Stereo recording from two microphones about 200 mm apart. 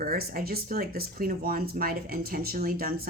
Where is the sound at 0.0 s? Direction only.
50° right (ahead or behind).